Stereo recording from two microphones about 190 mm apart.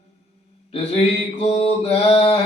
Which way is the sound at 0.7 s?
35° left (ahead or behind).